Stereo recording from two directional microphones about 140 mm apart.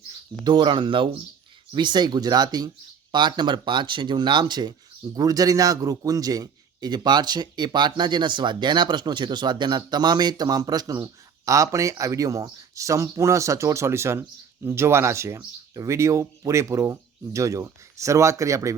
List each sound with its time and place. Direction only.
0.4 s a man's voice: 35° right (ahead or behind)